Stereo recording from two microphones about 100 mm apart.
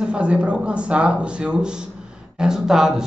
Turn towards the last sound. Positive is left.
turn(degrees=-5)  # may be behind; listen again after turning